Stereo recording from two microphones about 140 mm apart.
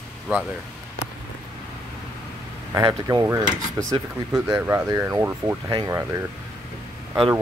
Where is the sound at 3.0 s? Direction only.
20° right (ahead or behind).